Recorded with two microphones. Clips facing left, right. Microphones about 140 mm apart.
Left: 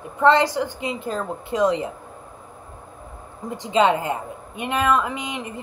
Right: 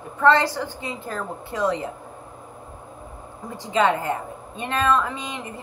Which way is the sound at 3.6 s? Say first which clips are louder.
Left 2 dB; 20° left (ahead or behind).